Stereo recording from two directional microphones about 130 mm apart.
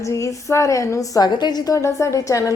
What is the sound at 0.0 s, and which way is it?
A woman's voice, 25° left (ahead or behind).